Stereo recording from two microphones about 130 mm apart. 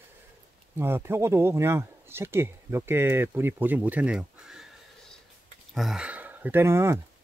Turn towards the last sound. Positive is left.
turn(degrees=-20)  # may be behind; listen again after turning